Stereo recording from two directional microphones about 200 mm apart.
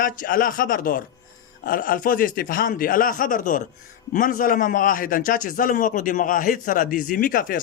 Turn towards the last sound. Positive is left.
turn(degrees=45)  # may be behind; listen again after turning